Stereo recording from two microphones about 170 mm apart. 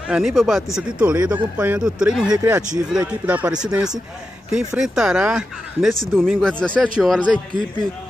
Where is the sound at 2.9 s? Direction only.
5° right (ahead or behind).